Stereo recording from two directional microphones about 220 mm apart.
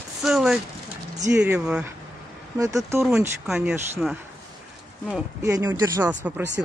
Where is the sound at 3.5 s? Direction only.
Centre (ahead or behind).